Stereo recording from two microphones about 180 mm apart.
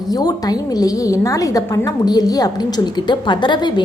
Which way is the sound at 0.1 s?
20° left (ahead or behind).